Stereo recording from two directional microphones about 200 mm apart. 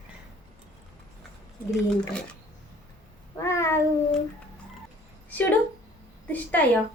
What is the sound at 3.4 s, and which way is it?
Cat, 15° left (ahead or behind).